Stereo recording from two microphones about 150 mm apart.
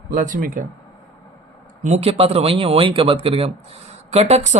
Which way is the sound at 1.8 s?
45° right (ahead or behind).